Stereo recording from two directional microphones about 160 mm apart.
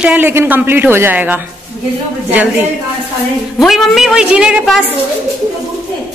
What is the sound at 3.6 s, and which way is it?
A woman's voice, centre (ahead or behind).